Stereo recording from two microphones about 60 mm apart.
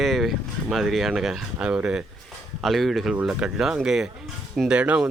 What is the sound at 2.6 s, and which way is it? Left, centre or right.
Speech, centre.